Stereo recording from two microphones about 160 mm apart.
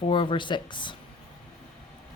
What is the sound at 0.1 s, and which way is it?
Speech, 30° left (ahead or behind).